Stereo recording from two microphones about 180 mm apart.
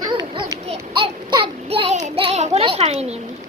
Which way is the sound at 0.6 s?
30° right (ahead or behind).